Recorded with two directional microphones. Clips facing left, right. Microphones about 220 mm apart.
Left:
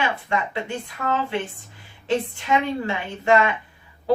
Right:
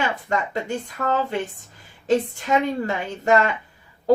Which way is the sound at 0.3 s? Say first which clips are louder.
Right 1 dB; 40° right (ahead or behind).